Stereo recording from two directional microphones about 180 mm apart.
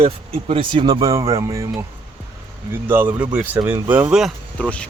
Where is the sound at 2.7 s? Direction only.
10° right (ahead or behind).